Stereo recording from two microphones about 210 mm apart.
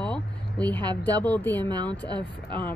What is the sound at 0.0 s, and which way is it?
Speech, 5° left (ahead or behind).